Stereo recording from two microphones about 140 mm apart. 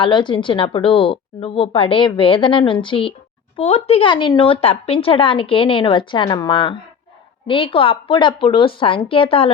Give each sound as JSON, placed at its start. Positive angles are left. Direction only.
{"t": 0.0, "sound": "a woman's voice", "side_deg": 35}
{"t": 4.1, "sound": "a woman's voice", "side_deg": 30}